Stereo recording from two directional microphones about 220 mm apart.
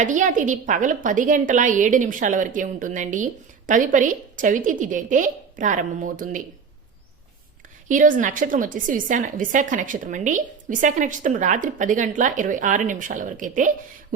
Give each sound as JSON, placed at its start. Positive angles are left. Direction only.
{"t": 0.0, "sound": "a woman's voice", "side_deg": -35}
{"t": 7.9, "sound": "a woman's voice", "side_deg": -35}